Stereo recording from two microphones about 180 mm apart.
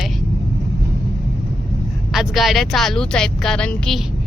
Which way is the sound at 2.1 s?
Centre (ahead or behind).